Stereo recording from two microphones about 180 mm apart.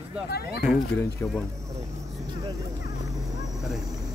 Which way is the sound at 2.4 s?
20° right (ahead or behind).